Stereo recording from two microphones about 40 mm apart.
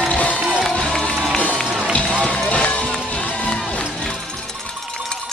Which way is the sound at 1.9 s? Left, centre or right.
Left.